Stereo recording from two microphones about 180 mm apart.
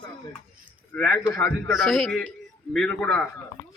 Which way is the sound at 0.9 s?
5° left (ahead or behind).